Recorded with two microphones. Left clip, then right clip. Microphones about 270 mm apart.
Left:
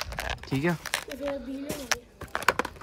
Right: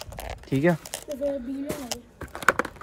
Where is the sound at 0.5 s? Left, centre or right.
Centre.